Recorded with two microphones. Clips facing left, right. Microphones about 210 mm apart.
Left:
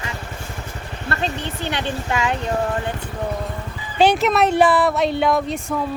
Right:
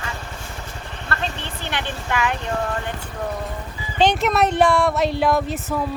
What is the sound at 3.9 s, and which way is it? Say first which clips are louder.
Speech: left 2 dB; 5° left (ahead or behind).